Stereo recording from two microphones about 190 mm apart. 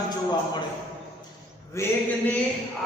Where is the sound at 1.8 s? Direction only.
15° left (ahead or behind).